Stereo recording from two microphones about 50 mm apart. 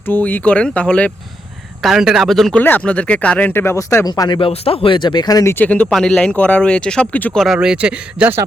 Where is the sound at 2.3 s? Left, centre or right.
Centre.